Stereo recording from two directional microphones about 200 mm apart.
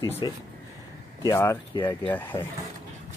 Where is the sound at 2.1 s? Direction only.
10° left (ahead or behind).